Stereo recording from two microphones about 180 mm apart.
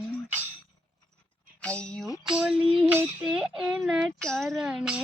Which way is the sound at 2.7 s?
10° right (ahead or behind).